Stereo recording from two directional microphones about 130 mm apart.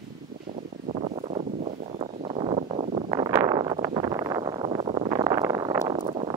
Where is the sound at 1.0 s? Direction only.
50° right (ahead or behind).